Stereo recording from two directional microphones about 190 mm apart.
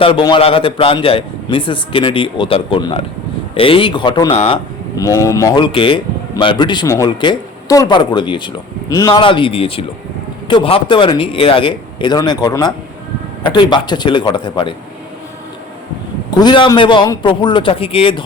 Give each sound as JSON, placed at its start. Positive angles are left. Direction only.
{"t": 0.0, "sound": "speech", "side_deg": 25}
{"t": 4.9, "sound": "speech", "side_deg": 15}
{"t": 16.3, "sound": "speech", "side_deg": 25}